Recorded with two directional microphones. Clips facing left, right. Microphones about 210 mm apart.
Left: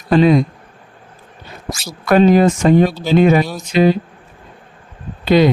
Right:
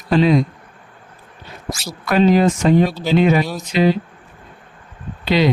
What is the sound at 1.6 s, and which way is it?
Speech, 50° left (ahead or behind).